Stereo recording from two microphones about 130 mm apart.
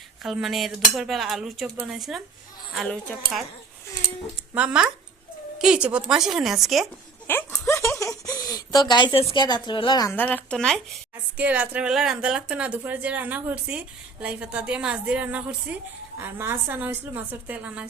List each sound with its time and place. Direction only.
0.2 s cutlery: centre (ahead or behind)
1.7 s speech: 10° right (ahead or behind)
2.0 s cutlery: centre (ahead or behind)
4.5 s speech: 10° right (ahead or behind)
5.5 s cutlery: 5° right (ahead or behind)
7.3 s a sound: 20° left (ahead or behind); by 10.1 s 35° left (ahead or behind)
10.1 s a woman's voice: 15° left (ahead or behind)
11.3 s speech: 10° right (ahead or behind)